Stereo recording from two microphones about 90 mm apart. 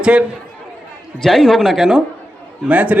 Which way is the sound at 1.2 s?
5° left (ahead or behind).